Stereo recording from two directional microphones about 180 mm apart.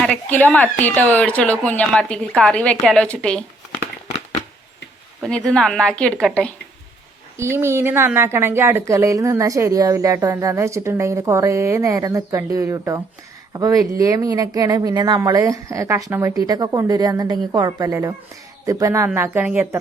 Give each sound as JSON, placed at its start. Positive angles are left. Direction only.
{"t": 0.0, "sound": "a woman's voice", "side_deg": 5}
{"t": 5.2, "sound": "a woman's voice", "side_deg": 5}
{"t": 7.3, "sound": "a woman's voice", "side_deg": -15}